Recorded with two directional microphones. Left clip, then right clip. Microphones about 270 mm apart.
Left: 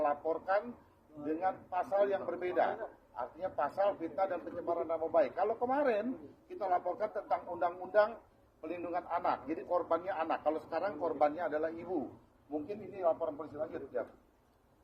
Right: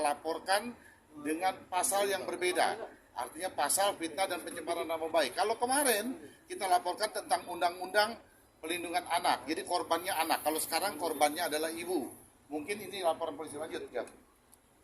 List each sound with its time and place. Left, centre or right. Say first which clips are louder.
0.0 s a man's voice: even; centre